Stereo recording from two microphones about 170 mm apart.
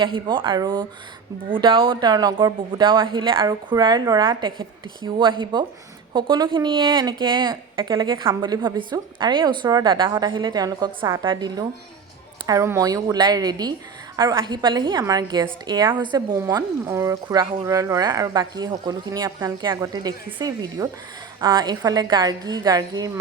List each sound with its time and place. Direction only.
0.0 s speech: 30° right (ahead or behind)